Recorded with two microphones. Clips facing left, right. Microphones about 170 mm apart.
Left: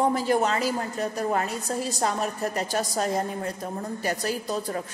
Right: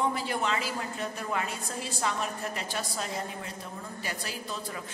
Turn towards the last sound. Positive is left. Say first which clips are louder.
# left 8 dB
turn(degrees=45)  # may be behind; listen again after turning